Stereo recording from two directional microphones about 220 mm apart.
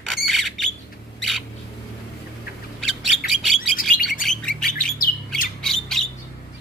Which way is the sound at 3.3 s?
Centre (ahead or behind).